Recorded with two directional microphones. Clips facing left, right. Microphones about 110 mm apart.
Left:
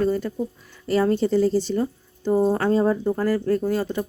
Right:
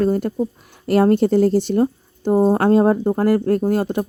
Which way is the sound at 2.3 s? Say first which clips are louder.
Right 4 dB; 40° right (ahead or behind).